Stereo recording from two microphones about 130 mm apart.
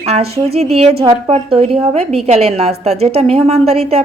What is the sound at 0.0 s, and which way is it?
A woman's voice, 50° right (ahead or behind).